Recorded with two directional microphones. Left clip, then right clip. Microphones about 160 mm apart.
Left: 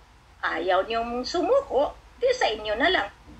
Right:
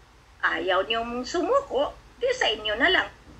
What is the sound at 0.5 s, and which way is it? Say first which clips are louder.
A woman's voice: left 3 dB; 25° right (ahead or behind).